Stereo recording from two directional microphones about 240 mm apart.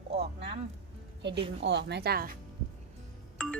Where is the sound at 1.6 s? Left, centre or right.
Right.